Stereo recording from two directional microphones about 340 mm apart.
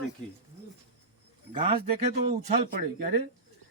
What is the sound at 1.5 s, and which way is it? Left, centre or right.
Speech, centre.